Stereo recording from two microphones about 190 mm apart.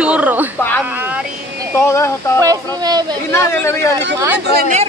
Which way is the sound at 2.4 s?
20° right (ahead or behind).